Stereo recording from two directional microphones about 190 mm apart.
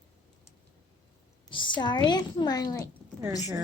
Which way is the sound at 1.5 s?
25° left (ahead or behind).